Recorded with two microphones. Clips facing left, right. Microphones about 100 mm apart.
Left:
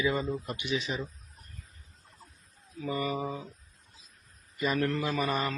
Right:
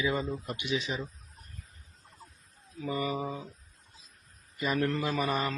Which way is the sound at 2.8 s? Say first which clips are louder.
Even; 15° right (ahead or behind).